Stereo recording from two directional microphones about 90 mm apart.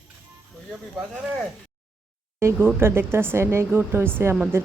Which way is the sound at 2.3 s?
30° right (ahead or behind).